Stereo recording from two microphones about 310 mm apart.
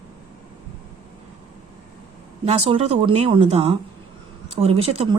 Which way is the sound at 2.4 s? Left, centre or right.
Centre.